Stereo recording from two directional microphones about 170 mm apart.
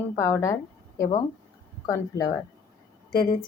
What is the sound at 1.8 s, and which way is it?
Speech, 20° left (ahead or behind).